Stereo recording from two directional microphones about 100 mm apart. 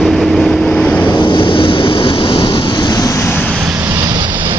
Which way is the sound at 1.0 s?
50° left (ahead or behind).